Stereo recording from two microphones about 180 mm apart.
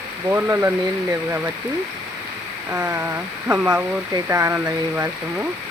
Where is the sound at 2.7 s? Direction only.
15° right (ahead or behind).